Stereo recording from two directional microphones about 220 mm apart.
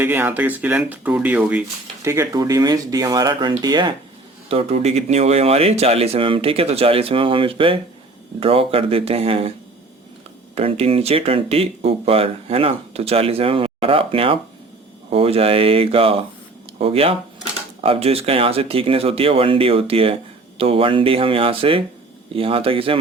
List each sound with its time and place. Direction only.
0.0 s speech: 10° right (ahead or behind); by 9.5 s 25° right (ahead or behind)
10.5 s speech: 25° right (ahead or behind)